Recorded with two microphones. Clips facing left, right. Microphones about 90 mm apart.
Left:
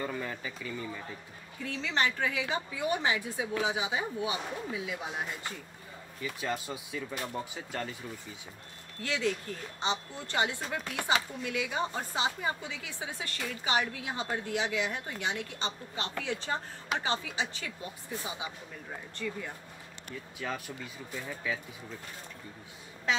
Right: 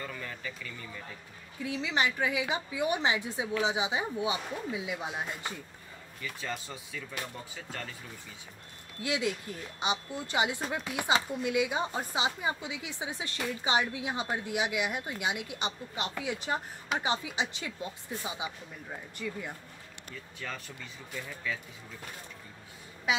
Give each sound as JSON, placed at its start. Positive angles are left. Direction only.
{"t": 0.0, "sound": "speech", "side_deg": 20}
{"t": 1.6, "sound": "speech", "side_deg": -15}
{"t": 6.2, "sound": "speech", "side_deg": 15}
{"t": 9.0, "sound": "speech", "side_deg": -15}
{"t": 20.3, "sound": "speech", "side_deg": 10}
{"t": 23.1, "sound": "speech", "side_deg": -10}